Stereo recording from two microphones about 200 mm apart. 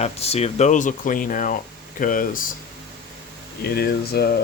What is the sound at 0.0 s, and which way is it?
Speech, 30° left (ahead or behind).